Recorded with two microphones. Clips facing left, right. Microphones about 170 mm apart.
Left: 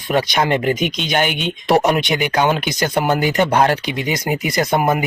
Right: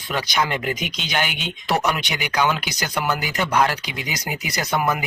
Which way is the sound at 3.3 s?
50° left (ahead or behind).